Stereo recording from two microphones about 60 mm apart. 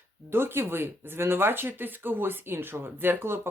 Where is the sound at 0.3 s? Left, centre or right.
Right.